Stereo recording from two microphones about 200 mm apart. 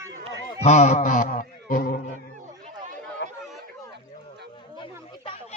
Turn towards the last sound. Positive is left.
turn(degrees=25)  # may be behind; listen again after turning